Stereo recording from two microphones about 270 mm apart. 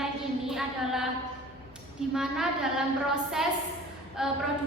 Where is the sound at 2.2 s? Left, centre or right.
Centre.